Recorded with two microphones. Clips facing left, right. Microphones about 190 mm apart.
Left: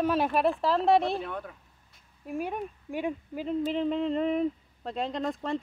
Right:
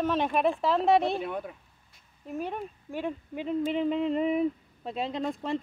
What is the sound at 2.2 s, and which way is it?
Speech, 10° left (ahead or behind).